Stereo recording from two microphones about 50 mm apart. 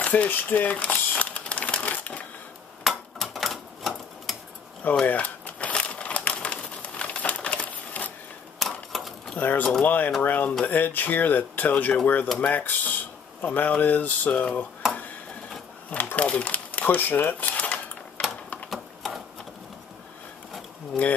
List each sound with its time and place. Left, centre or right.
0.0 s cutlery: left
0.3 s typewriter: left
2.8 s typewriter: centre
5.0 s crumpling: left
8.5 s a sound: centre
9.4 s speech: left
14.3 s cutlery: left
16.2 s a sound: left
18.7 s sewing machine: centre